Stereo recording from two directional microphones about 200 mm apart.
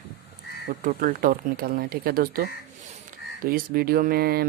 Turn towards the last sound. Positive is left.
turn(degrees=-50)  # may be behind; listen again after turning